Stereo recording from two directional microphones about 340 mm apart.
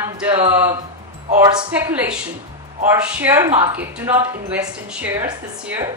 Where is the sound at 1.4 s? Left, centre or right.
Centre.